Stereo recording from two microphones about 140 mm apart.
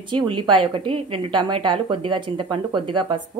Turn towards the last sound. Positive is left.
turn(degrees=-35)  # may be behind; listen again after turning